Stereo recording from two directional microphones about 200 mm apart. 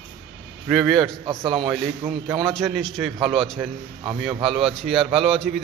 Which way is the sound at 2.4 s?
Centre (ahead or behind).